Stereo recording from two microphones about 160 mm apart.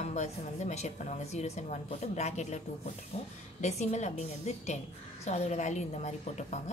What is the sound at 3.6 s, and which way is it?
A woman's voice, 45° left (ahead or behind).